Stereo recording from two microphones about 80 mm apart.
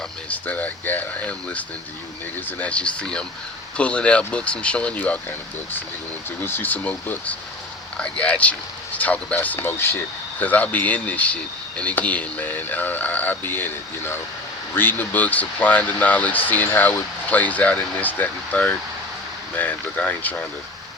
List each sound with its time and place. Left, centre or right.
0.3 s speech: centre
6.4 s speech: left